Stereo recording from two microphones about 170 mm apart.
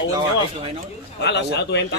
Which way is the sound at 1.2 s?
90° left.